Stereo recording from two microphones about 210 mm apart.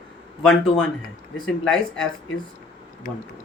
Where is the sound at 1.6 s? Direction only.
5° left (ahead or behind).